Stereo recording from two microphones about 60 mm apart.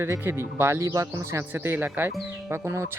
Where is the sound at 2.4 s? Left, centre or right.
Right.